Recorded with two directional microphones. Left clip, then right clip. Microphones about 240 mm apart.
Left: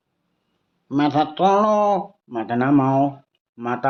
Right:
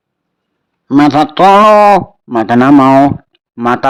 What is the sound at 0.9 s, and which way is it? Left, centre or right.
A man's voice, right.